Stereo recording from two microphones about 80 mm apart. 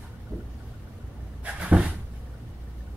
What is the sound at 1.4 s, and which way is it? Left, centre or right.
Cupboard open or close, centre.